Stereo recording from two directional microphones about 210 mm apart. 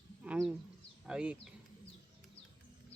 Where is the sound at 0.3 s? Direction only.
5° right (ahead or behind).